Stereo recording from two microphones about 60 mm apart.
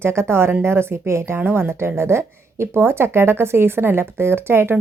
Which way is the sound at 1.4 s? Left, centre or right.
Right.